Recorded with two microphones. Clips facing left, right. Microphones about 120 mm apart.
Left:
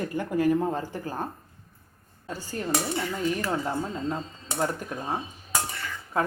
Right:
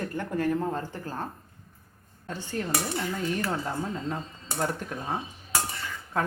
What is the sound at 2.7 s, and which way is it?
Speech, 20° left (ahead or behind).